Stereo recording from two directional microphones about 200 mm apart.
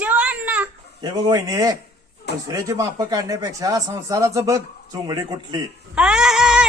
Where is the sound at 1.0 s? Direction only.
20° right (ahead or behind).